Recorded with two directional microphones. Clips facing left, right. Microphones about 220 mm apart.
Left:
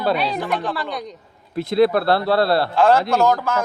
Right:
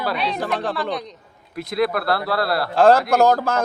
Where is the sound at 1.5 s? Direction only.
30° left (ahead or behind).